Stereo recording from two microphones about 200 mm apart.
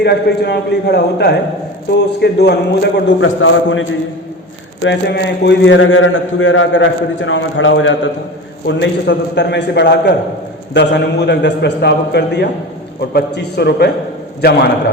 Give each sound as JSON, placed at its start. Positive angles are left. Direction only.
{"t": 0.0, "sound": "a man's voice", "side_deg": 55}
{"t": 4.8, "sound": "a man's voice", "side_deg": 60}
{"t": 8.6, "sound": "a man's voice", "side_deg": 60}